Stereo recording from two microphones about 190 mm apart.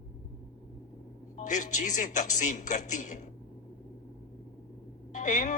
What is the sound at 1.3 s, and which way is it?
Speech, 40° left (ahead or behind).